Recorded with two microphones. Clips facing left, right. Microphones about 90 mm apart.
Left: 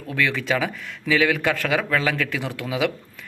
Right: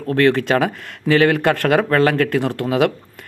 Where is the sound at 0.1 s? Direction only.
55° right (ahead or behind).